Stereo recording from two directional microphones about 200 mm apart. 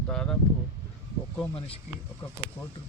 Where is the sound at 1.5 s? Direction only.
30° left (ahead or behind).